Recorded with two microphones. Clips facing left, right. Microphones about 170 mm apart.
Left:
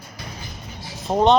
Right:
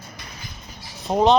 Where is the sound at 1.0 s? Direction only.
Centre (ahead or behind).